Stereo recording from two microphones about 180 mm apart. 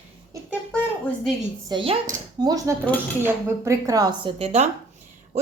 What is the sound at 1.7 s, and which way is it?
Speech, 30° right (ahead or behind).